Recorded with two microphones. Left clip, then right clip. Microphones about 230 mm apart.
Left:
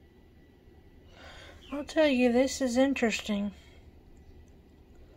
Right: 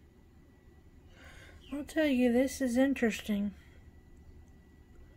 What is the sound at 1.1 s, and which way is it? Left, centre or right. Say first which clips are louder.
A woman's voice: left 5 dB; centre.